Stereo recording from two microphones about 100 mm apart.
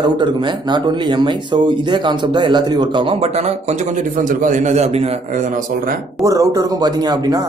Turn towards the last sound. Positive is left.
turn(degrees=-40)  # may be behind; listen again after turning